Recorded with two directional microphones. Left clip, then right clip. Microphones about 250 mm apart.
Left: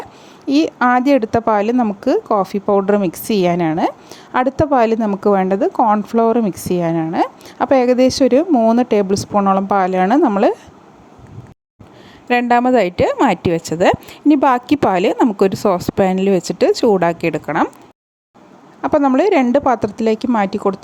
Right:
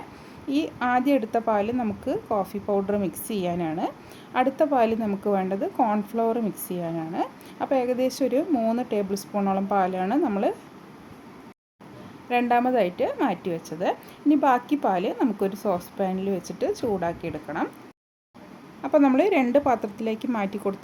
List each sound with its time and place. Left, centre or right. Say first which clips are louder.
0.4 s speech: left 11 dB; left
12.3 s speech: left 9 dB; left
18.8 s speech: left 6 dB; left